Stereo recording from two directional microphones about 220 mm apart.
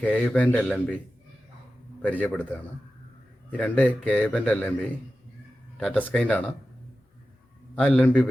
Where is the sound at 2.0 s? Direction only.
5° left (ahead or behind).